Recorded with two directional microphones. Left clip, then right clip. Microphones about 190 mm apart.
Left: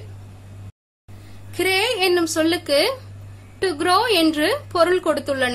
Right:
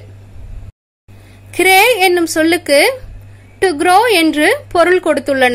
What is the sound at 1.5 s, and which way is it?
A woman's voice, 30° right (ahead or behind).